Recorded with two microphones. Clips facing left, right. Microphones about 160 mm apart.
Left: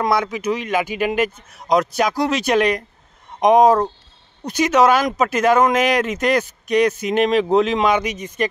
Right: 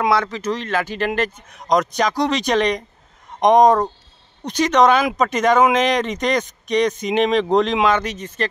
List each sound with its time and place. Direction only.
0.1 s speech: 10° left (ahead or behind)